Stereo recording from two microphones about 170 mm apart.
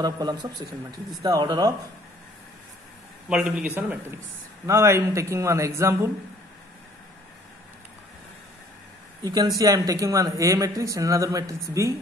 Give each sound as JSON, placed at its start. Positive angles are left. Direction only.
{"t": 0.0, "sound": "speech", "side_deg": -25}
{"t": 3.3, "sound": "a man's voice", "side_deg": -5}
{"t": 9.2, "sound": "speech", "side_deg": -25}